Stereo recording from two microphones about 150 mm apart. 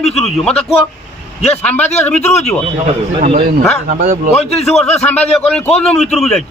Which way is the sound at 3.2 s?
45° right (ahead or behind).